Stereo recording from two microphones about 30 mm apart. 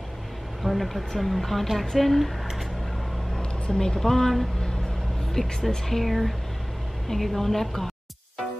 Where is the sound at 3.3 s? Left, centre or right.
Left.